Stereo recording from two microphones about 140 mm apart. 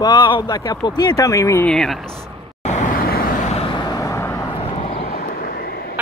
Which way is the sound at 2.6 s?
55° left (ahead or behind).